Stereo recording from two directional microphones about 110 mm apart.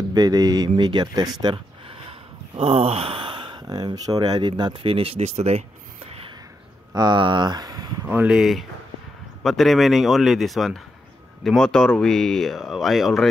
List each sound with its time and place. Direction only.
0.1 s speech: 35° right (ahead or behind)
2.0 s speech: 60° right (ahead or behind); by 4.9 s 45° right (ahead or behind)
4.9 s speech: 60° right (ahead or behind); by 5.6 s 80° right
6.0 s a sound: 60° right (ahead or behind)
6.9 s speech: 40° right (ahead or behind)
8.1 s speech: 10° right (ahead or behind)